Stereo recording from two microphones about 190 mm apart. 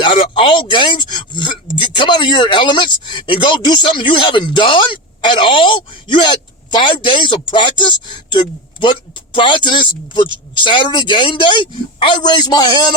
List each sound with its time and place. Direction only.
0.0 s speech: 25° left (ahead or behind)